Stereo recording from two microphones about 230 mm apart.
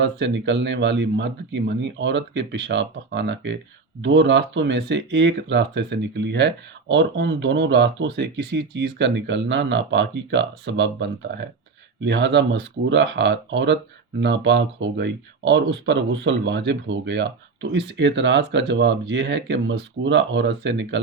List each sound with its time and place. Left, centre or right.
0.0 s speech: right